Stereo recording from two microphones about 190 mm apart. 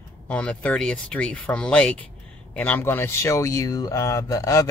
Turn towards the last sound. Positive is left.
turn(degrees=20)  # may be behind; listen again after turning